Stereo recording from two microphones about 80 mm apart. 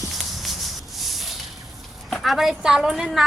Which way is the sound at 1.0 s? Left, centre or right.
Centre.